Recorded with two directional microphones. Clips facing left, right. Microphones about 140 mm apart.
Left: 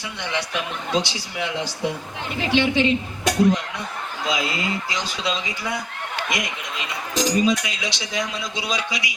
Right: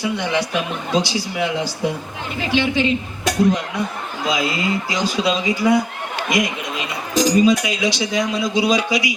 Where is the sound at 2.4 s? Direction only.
20° left (ahead or behind).